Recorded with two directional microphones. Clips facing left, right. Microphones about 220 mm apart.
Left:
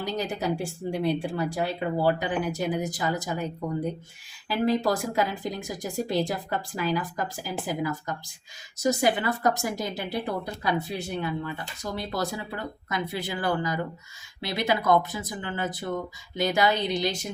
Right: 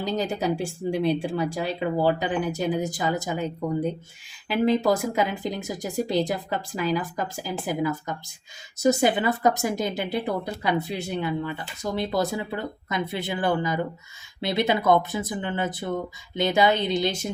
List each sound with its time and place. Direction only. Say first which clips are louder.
0.0 s speech: right 3 dB; 25° right (ahead or behind)